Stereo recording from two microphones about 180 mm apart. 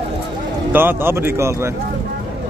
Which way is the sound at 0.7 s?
10° right (ahead or behind).